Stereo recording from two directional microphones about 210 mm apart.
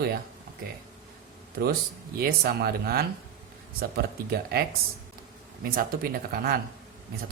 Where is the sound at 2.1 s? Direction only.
45° right (ahead or behind).